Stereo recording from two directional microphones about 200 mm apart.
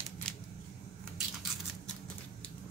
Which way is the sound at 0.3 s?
5° left (ahead or behind).